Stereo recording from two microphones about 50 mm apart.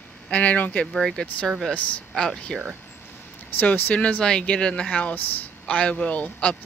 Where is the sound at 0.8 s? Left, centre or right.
Centre.